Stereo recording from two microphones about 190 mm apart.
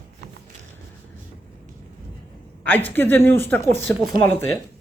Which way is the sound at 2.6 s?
10° left (ahead or behind).